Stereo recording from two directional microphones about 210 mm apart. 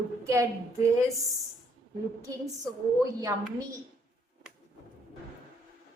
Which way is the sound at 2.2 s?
15° right (ahead or behind).